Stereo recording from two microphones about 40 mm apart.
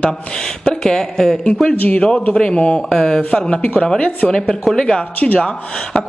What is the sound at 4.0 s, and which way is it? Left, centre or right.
Speech, left.